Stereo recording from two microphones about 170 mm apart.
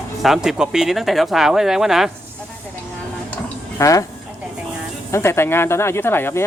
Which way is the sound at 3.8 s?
20° left (ahead or behind).